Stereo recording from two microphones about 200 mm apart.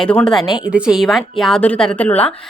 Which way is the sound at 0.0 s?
5° left (ahead or behind).